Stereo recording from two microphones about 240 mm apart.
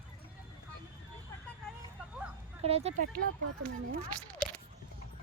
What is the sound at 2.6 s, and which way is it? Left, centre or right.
Speech, right.